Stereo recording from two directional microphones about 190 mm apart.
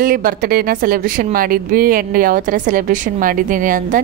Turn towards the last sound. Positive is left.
turn(degrees=-45)  # may be behind; listen again after turning